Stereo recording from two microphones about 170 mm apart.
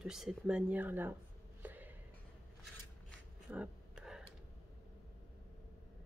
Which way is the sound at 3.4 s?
10° right (ahead or behind).